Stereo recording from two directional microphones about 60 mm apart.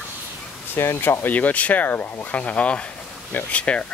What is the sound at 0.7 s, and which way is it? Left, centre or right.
Speech, left.